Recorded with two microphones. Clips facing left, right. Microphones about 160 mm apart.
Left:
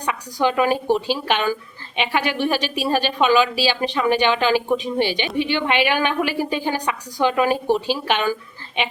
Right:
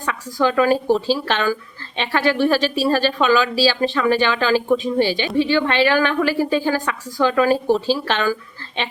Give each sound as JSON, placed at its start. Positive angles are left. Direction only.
{"t": 0.0, "sound": "a woman's voice", "side_deg": 20}